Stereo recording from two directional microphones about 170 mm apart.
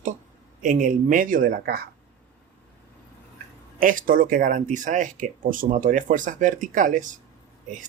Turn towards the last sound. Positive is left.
turn(degrees=-50)  # may be behind; listen again after turning